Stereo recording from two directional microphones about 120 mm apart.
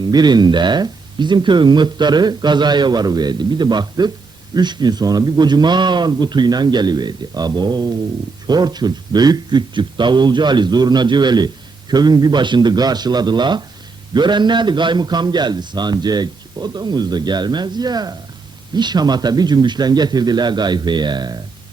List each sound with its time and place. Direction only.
0.0 s a man's voice: 35° right (ahead or behind)